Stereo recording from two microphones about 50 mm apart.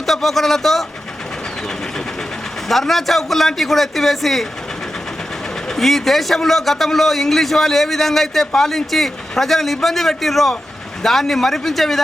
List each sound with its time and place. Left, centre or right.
0.0 s speech: centre
2.6 s a man's voice: centre
5.6 s a man's voice: centre